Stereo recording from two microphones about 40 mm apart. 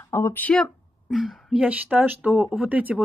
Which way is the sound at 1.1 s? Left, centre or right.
Right.